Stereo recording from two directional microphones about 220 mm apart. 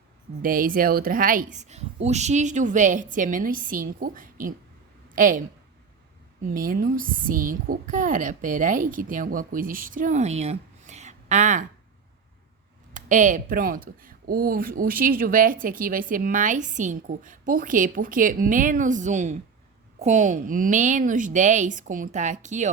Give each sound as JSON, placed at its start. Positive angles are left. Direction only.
{"t": 0.4, "sound": "a woman's voice", "side_deg": -40}
{"t": 6.4, "sound": "speech", "side_deg": -40}
{"t": 12.9, "sound": "speech", "side_deg": -35}